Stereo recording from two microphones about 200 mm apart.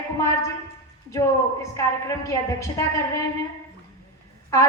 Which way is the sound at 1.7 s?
15° left (ahead or behind).